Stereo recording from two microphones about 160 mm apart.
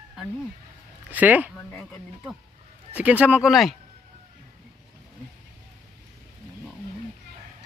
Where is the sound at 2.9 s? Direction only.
10° right (ahead or behind).